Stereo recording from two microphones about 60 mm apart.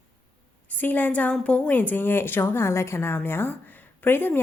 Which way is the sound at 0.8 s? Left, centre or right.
Left.